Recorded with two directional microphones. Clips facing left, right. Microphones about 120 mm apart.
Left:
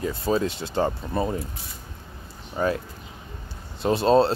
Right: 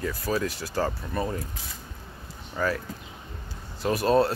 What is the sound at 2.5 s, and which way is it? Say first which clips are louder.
Speech: left 3 dB; 25° left (ahead or behind).